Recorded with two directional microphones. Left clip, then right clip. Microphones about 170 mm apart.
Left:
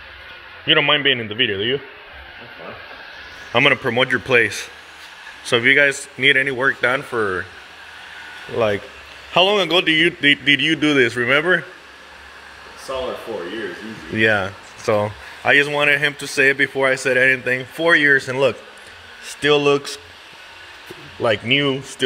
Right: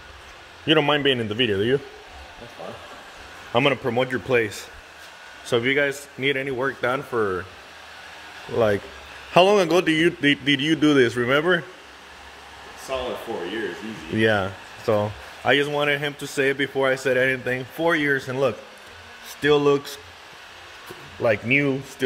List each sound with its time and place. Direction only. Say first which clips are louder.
0.7 s a man's voice: left 4 dB; 35° right (ahead or behind)
3.5 s speech: left 5 dB; 5° right (ahead or behind)
8.5 s speech: left 1 dB; 20° right (ahead or behind)
9.3 s speech: left 1 dB; 35° right (ahead or behind); by 11.6 s 15° right (ahead or behind)
14.1 s speech: left 4 dB; 15° right (ahead or behind); by 20.0 s 5° left (ahead or behind)
21.2 s speech: left 3 dB; 5° left (ahead or behind)